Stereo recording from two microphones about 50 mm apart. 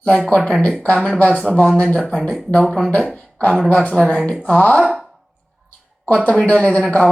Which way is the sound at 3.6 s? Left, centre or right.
Left.